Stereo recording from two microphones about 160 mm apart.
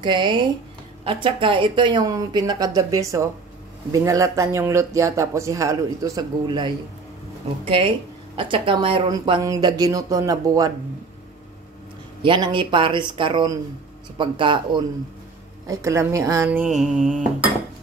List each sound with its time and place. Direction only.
0.0 s speech: 30° right (ahead or behind)
12.2 s speech: 30° right (ahead or behind)
15.6 s speech: 20° right (ahead or behind)
16.4 s mantra: 5° right (ahead or behind)